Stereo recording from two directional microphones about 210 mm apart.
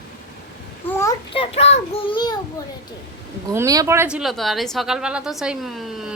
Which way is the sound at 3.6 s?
15° right (ahead or behind).